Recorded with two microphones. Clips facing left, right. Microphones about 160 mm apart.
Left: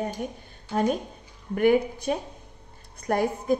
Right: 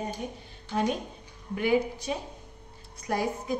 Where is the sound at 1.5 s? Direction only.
55° left (ahead or behind).